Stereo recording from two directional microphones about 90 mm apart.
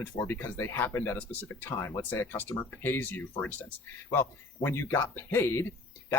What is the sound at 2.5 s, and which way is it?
Speech, 30° left (ahead or behind).